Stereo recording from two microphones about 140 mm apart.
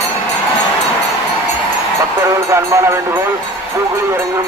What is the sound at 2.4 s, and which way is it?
Speech, 20° right (ahead or behind).